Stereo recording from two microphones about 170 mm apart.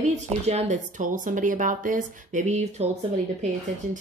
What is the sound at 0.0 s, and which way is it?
Speech, 40° right (ahead or behind).